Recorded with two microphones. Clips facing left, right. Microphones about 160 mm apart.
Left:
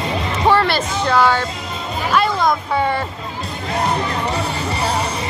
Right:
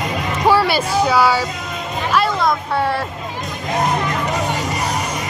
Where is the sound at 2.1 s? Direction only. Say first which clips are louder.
Left 1 dB; centre (ahead or behind).